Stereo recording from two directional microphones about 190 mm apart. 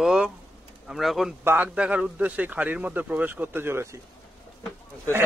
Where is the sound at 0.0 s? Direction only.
5° right (ahead or behind).